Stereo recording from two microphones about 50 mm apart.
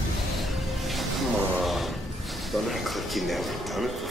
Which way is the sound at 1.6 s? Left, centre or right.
Centre.